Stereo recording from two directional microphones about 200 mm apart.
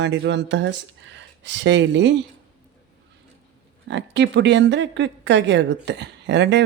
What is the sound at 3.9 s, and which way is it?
Speech, 60° right (ahead or behind).